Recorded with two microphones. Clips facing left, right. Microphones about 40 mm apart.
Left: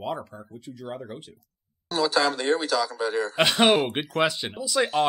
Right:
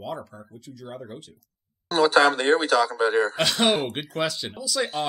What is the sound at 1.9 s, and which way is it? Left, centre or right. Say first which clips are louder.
Speech: right 5 dB; right.